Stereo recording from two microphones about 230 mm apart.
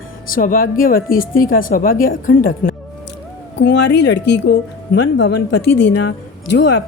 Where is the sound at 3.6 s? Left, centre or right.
Left.